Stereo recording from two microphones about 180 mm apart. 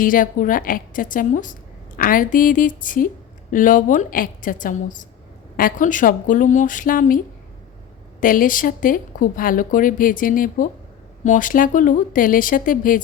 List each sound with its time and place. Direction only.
0.0 s speech: 50° left (ahead or behind)
8.2 s speech: 50° left (ahead or behind)